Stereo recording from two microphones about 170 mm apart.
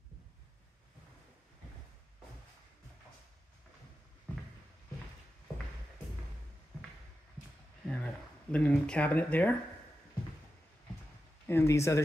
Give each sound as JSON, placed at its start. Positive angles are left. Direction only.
{"t": 7.8, "sound": "speech", "side_deg": 5}
{"t": 11.4, "sound": "speech", "side_deg": 15}